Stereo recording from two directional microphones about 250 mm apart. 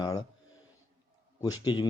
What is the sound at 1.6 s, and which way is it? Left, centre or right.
Speech, centre.